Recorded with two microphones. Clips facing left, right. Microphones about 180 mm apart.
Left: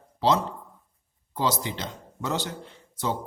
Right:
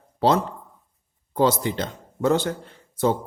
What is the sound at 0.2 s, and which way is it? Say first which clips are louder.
Speech: right 3 dB; 55° right (ahead or behind).